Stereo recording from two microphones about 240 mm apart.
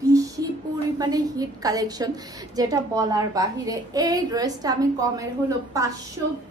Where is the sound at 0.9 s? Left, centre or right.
Centre.